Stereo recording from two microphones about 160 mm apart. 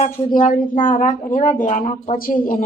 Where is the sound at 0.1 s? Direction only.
55° left (ahead or behind).